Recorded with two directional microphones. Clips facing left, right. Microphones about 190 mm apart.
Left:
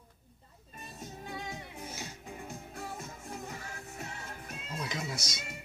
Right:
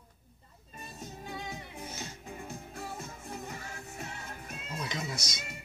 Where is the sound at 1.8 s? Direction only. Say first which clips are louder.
Right 1 dB; 10° left (ahead or behind).